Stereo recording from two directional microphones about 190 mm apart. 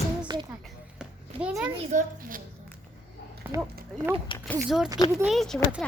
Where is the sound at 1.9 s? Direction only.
45° right (ahead or behind).